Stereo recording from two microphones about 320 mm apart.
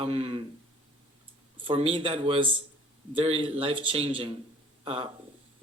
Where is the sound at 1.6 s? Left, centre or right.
Centre.